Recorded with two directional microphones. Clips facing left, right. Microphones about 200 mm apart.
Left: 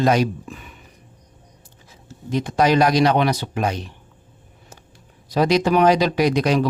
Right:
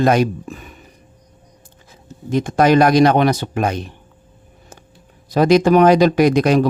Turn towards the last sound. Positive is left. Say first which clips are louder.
# right 5 dB
turn(degrees=-50)  # may be behind; listen again after turning